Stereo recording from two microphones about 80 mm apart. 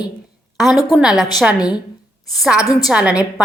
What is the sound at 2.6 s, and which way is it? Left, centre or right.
Speech, left.